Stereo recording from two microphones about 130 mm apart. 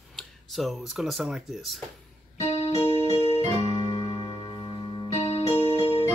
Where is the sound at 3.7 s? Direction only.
35° left (ahead or behind).